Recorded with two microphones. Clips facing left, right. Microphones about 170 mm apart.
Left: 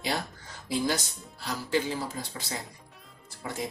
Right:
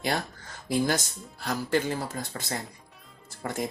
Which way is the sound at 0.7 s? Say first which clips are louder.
Right 3 dB; 50° right (ahead or behind).